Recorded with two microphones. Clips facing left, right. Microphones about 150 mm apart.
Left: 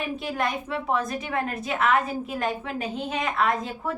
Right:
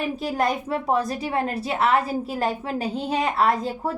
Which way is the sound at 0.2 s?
40° right (ahead or behind).